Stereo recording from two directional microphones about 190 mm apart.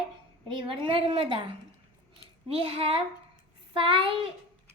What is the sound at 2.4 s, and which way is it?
A woman's voice, 30° right (ahead or behind).